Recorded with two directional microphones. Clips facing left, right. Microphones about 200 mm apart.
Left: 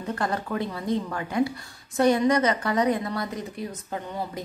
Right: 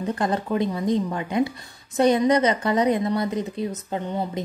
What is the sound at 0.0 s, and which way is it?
Speech, 20° right (ahead or behind).